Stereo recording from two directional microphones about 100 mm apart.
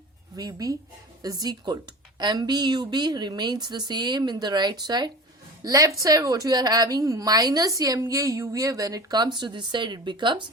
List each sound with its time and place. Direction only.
0.3 s a woman's voice: 35° right (ahead or behind)